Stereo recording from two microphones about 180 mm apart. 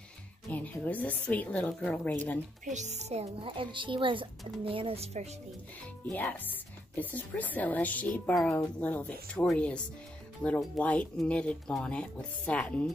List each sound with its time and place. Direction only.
0.5 s speech: 10° left (ahead or behind)
2.6 s speech: 40° right (ahead or behind)
6.0 s speech: 10° left (ahead or behind)